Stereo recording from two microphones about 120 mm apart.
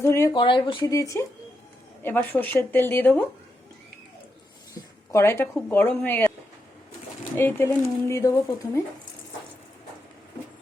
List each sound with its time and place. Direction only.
0.0 s speech: 25° left (ahead or behind)
0.3 s speech: 45° left (ahead or behind)
0.9 s speech: 25° left (ahead or behind)
2.0 s speech: 15° left (ahead or behind)
4.7 s a sound: 25° left (ahead or behind)
5.5 s speech: 15° left (ahead or behind)
7.3 s speech: 20° left (ahead or behind)